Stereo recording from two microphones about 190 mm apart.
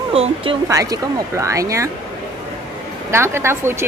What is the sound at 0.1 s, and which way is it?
Speech, 30° right (ahead or behind).